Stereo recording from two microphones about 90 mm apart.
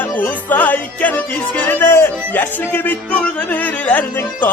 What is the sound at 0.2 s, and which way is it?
Music, 20° left (ahead or behind).